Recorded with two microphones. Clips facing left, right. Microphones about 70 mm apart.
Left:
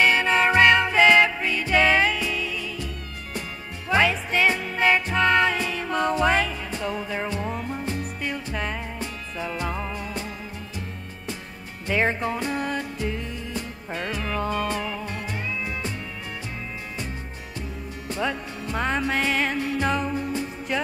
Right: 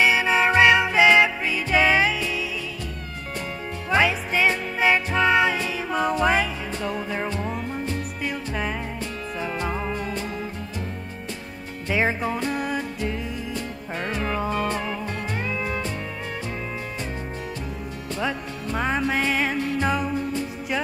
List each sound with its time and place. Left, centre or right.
0.0 s music: centre
3.9 s music: centre
8.2 s music: centre
11.9 s music: centre
14.1 s music: right
14.4 s music: centre
14.7 s music: right
18.2 s music: centre